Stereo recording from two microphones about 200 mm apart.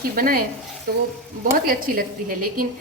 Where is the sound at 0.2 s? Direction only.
45° right (ahead or behind).